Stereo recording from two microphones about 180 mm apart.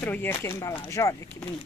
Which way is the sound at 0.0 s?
10° left (ahead or behind).